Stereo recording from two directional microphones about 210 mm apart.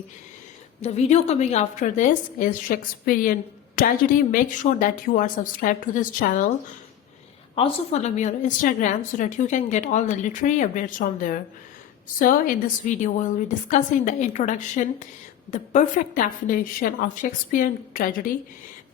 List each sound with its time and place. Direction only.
0.8 s a woman's voice: 30° left (ahead or behind)
7.5 s a woman's voice: 30° left (ahead or behind)